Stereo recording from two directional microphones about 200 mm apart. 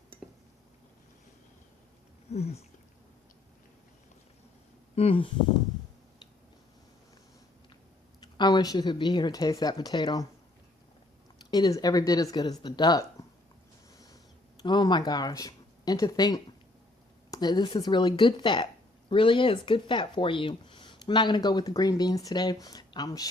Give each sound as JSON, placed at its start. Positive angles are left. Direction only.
{"t": 2.3, "sound": "a sound", "side_deg": 30}
{"t": 4.9, "sound": "speech", "side_deg": 30}
{"t": 8.2, "sound": "speech", "side_deg": 20}
{"t": 11.3, "sound": "speech", "side_deg": 20}
{"t": 14.6, "sound": "speech", "side_deg": 20}